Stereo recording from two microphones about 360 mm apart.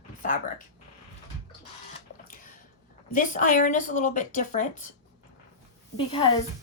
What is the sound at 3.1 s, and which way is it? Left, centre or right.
Speech, left.